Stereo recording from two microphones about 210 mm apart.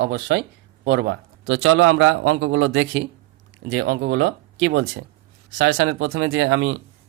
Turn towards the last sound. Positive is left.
turn(degrees=-70)  # may be behind; listen again after turning